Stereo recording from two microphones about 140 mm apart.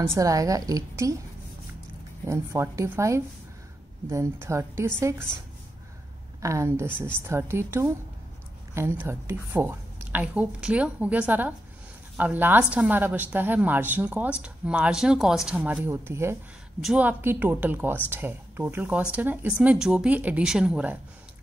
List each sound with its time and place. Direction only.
0.0 s a woman's voice: 20° right (ahead or behind)
2.2 s a woman's voice: 20° right (ahead or behind)
6.4 s a woman's voice: 20° right (ahead or behind)